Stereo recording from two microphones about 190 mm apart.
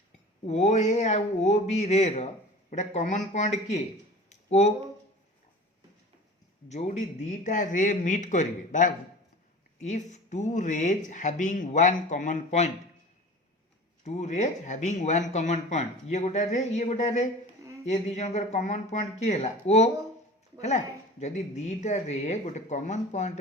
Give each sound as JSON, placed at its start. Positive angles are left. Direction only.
{"t": 0.4, "sound": "speech", "side_deg": 35}
{"t": 4.3, "sound": "a sound", "side_deg": 35}
{"t": 6.7, "sound": "speech", "side_deg": 35}
{"t": 14.0, "sound": "speech", "side_deg": 35}